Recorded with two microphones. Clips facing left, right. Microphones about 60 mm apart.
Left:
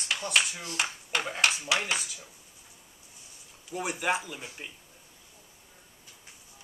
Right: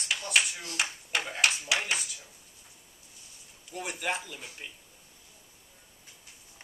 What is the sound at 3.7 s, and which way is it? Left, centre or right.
Speech, centre.